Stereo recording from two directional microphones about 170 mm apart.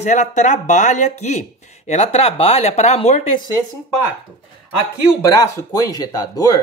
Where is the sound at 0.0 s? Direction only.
45° left (ahead or behind).